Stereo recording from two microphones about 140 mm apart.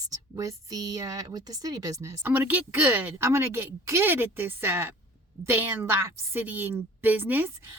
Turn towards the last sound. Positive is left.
turn(degrees=-15)  # may be behind; listen again after turning